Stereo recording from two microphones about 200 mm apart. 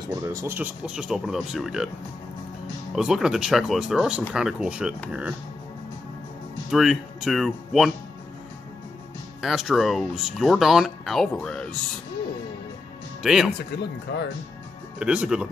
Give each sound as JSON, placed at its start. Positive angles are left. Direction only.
{"t": 0.1, "sound": "speech", "side_deg": -15}
{"t": 2.9, "sound": "speech", "side_deg": -5}
{"t": 6.7, "sound": "speech", "side_deg": 0}
{"t": 9.4, "sound": "speech", "side_deg": 0}
{"t": 13.2, "sound": "speech", "side_deg": 0}
{"t": 13.7, "sound": "speech", "side_deg": 55}
{"t": 15.0, "sound": "speech", "side_deg": -5}